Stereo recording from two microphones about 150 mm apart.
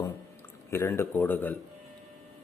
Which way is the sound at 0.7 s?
15° left (ahead or behind).